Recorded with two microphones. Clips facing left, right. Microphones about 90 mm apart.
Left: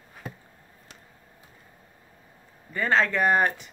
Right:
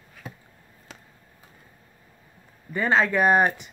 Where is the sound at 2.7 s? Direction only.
15° right (ahead or behind).